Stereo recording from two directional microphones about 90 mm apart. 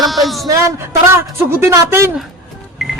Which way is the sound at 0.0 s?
Centre (ahead or behind).